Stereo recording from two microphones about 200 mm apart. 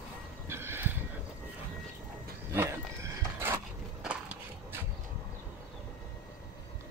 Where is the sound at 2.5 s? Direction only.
10° right (ahead or behind).